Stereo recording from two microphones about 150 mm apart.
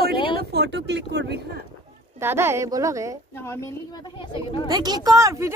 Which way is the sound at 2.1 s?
15° right (ahead or behind).